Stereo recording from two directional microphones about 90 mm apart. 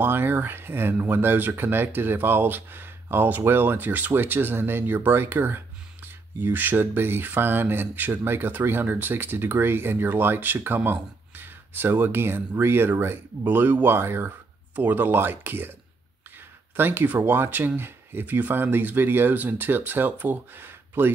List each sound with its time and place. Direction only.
0.0 s speech: 25° right (ahead or behind)
16.7 s speech: 25° right (ahead or behind)